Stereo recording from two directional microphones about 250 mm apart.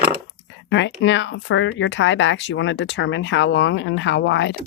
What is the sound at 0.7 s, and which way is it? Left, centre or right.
Speech, left.